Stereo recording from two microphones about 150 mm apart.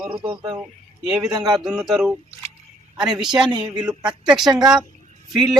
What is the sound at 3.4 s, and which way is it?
Speech, 30° right (ahead or behind).